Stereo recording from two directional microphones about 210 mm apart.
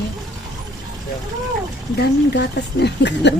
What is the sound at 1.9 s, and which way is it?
Speech, 55° left (ahead or behind).